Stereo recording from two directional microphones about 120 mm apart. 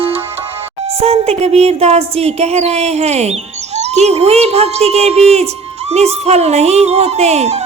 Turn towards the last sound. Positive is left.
turn(degrees=-65)  # may be behind; listen again after turning